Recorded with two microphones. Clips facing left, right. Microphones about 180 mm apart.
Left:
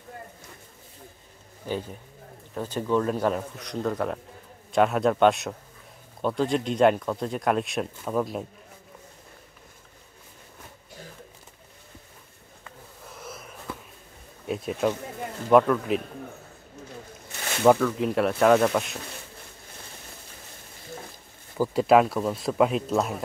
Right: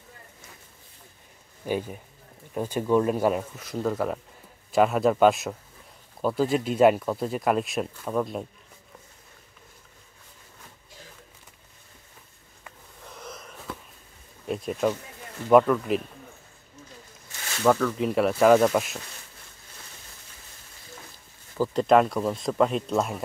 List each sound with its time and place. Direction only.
1.7 s speech: 10° right (ahead or behind)
13.0 s a sound: 5° left (ahead or behind)
14.4 s speech: centre (ahead or behind)
17.7 s speech: centre (ahead or behind)
21.5 s speech: 5° left (ahead or behind)